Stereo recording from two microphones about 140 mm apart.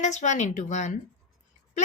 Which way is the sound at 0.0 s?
60° left (ahead or behind).